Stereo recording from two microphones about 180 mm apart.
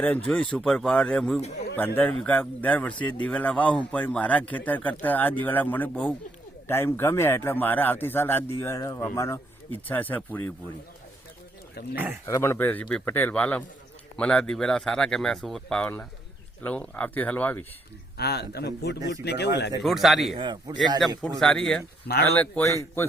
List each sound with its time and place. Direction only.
0.3 s speech: 5° left (ahead or behind)
11.9 s speech: 10° right (ahead or behind)
12.2 s speech: 15° left (ahead or behind)
18.2 s a man's voice: 65° left (ahead or behind)
18.9 s speech: 20° right (ahead or behind)
19.2 s speech: 70° left (ahead or behind)
19.8 s speech: centre (ahead or behind)
20.3 s speech: 25° right (ahead or behind)
21.2 s speech: centre (ahead or behind)